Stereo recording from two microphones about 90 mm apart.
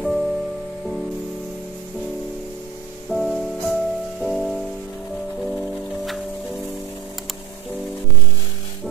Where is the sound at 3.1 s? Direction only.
Centre (ahead or behind).